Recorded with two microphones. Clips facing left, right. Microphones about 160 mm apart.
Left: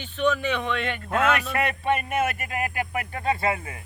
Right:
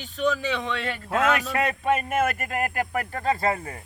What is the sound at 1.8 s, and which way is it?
Speech, 10° left (ahead or behind).